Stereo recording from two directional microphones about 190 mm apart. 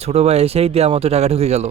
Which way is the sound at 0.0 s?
35° right (ahead or behind).